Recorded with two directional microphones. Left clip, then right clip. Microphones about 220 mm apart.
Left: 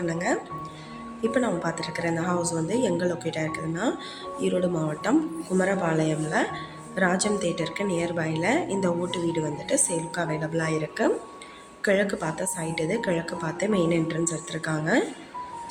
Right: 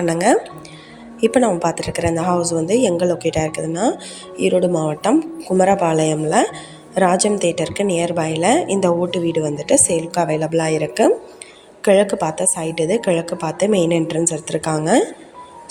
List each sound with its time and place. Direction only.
0.0 s speech: 40° right (ahead or behind)